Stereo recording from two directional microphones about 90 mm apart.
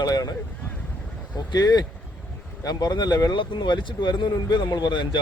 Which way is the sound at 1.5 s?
50° left (ahead or behind).